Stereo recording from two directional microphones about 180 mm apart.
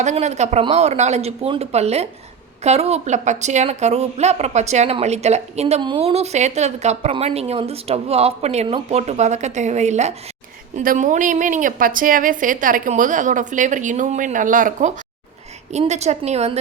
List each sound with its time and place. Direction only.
0.0 s a woman's voice: 40° right (ahead or behind)